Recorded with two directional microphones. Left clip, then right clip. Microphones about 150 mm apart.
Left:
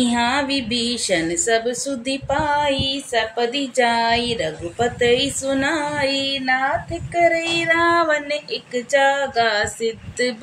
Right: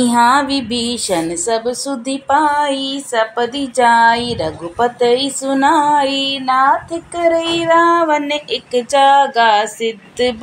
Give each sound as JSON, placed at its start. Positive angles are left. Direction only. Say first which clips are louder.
{"t": 0.0, "sound": "music", "louder": "right 8 dB", "side_deg": -25}
{"t": 0.5, "sound": "a woman's voice", "louder": "right 3 dB", "side_deg": -15}
{"t": 7.5, "sound": "a woman's voice", "louder": "right 5 dB", "side_deg": -15}